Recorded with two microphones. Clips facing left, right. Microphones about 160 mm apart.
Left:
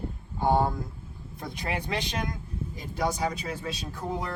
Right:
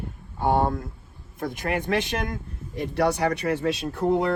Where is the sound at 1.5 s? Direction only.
50° right (ahead or behind).